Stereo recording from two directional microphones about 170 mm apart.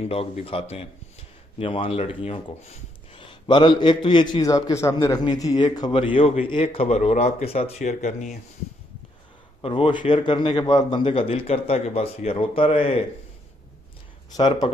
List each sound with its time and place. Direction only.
0.0 s speech: 35° left (ahead or behind)
9.6 s speech: 30° left (ahead or behind)
14.3 s speech: 25° left (ahead or behind)